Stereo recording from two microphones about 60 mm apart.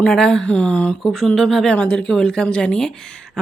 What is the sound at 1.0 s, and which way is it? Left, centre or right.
Speech, centre.